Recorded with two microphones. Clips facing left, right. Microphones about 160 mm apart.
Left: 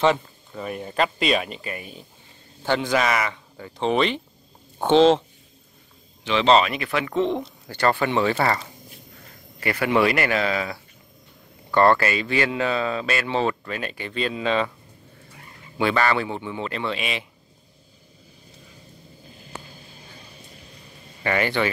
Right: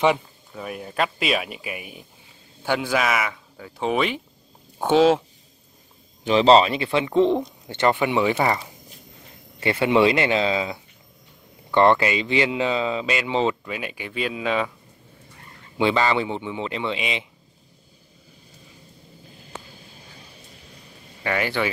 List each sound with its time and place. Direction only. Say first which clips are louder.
0.5 s speech: left 2 dB; 5° right (ahead or behind)
6.2 s speech: right 3 dB; 35° right (ahead or behind); by 8.5 s 15° right (ahead or behind)
9.6 s speech: right 2 dB; 25° right (ahead or behind); by 14.7 s 10° right (ahead or behind)
15.8 s speech: right 1 dB; 15° right (ahead or behind)
21.2 s speech: left 1 dB; 5° right (ahead or behind)